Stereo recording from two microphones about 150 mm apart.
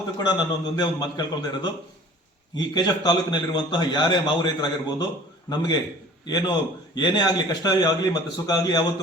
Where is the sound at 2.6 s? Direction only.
25° left (ahead or behind).